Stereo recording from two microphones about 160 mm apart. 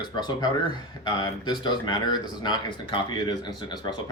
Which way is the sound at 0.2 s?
25° left (ahead or behind).